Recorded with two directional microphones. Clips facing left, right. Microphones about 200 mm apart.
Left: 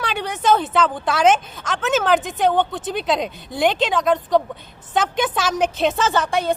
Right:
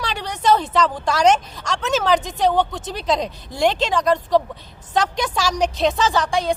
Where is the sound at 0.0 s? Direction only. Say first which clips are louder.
Even; 5° left (ahead or behind).